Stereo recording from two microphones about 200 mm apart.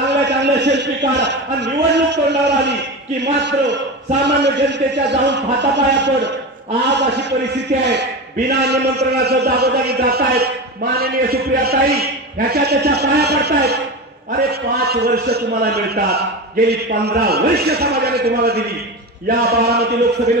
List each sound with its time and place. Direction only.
0.1 s a man's voice: 60° right (ahead or behind)
4.3 s a man's voice: 60° right (ahead or behind)